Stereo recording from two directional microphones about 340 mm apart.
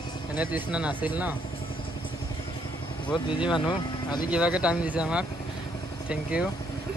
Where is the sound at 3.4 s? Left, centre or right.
Centre.